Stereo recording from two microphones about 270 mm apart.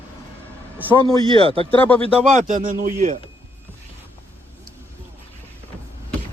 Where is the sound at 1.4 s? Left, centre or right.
Right.